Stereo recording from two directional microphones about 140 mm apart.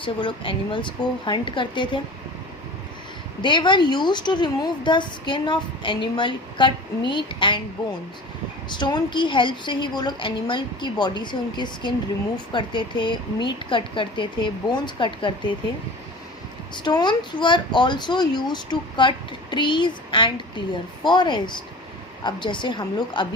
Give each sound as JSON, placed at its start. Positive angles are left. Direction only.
{"t": 0.0, "sound": "speech", "side_deg": 35}
{"t": 3.4, "sound": "speech", "side_deg": 35}
{"t": 8.7, "sound": "speech", "side_deg": 30}
{"t": 16.8, "sound": "speech", "side_deg": 30}